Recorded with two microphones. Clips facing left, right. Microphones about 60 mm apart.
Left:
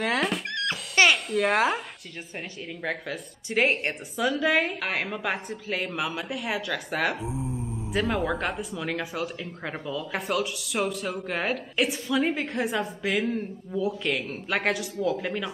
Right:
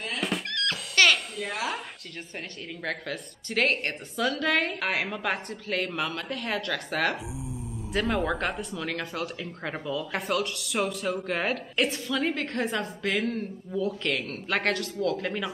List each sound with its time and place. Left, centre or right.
0.5 s music: centre
1.3 s speech: left
2.8 s speech: centre
7.2 s speech: left
7.9 s speech: centre